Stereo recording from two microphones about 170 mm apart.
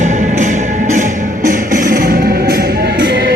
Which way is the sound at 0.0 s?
45° right (ahead or behind).